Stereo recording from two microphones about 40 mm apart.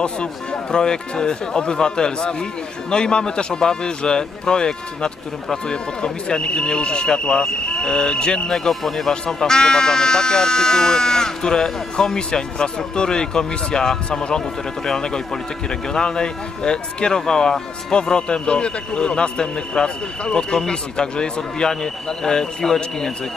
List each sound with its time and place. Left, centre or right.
0.0 s speech: left
8.5 s a man's voice: centre